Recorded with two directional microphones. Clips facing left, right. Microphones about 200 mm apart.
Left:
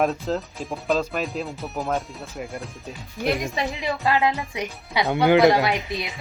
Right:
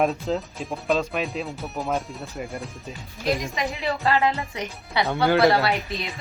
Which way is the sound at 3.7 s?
15° left (ahead or behind).